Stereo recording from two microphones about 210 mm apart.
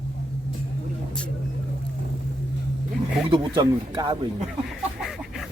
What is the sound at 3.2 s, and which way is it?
Speech, 20° right (ahead or behind).